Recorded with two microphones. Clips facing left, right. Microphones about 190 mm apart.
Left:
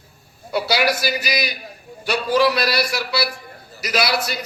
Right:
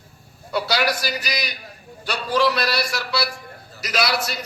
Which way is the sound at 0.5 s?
10° left (ahead or behind).